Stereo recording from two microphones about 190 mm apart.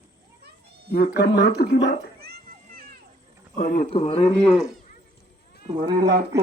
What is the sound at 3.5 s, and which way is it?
Speech, 45° left (ahead or behind).